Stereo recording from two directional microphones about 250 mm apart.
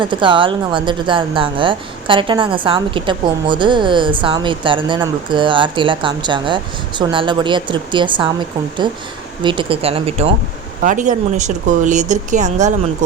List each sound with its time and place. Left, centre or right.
0.0 s a woman's voice: centre
9.4 s a woman's voice: centre